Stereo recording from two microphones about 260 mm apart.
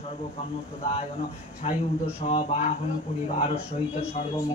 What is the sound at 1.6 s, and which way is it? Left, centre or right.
Speech, left.